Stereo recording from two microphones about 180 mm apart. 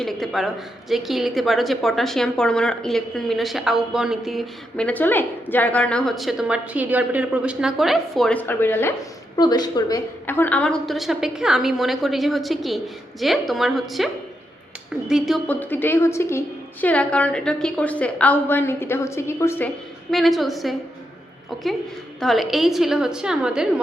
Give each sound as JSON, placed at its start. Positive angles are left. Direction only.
{"t": 0.0, "sound": "speech", "side_deg": 0}
{"t": 9.3, "sound": "a woman's voice", "side_deg": 20}
{"t": 10.2, "sound": "speech", "side_deg": 10}
{"t": 15.4, "sound": "a woman's voice", "side_deg": 10}